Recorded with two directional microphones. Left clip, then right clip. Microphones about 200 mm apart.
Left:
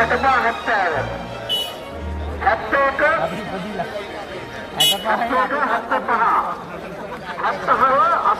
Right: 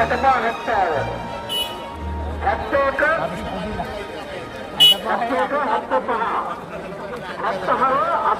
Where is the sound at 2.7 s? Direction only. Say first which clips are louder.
Right 1 dB; 30° right (ahead or behind).